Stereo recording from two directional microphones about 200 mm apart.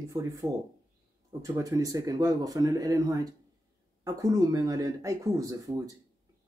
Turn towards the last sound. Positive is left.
turn(degrees=-15)  # may be behind; listen again after turning